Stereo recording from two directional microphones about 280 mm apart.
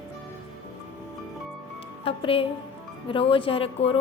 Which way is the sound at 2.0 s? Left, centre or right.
Centre.